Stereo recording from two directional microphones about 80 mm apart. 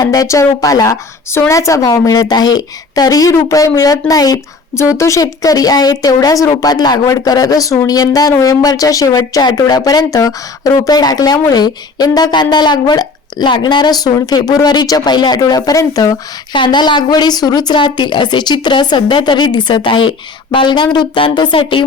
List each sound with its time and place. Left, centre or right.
0.0 s a woman's voice: left
1.3 s a woman's voice: left
4.7 s a woman's voice: left
9.4 s a woman's voice: left
16.5 s speech: left